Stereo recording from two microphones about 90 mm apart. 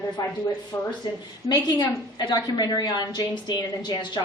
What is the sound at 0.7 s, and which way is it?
Speech, 30° left (ahead or behind).